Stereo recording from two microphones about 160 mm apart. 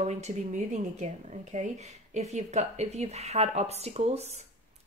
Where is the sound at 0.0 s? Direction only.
45° right (ahead or behind).